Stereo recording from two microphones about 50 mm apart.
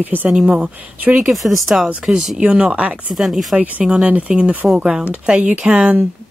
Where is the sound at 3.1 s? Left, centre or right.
Centre.